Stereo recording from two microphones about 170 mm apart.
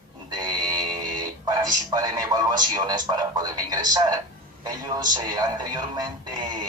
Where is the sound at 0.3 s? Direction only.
25° right (ahead or behind).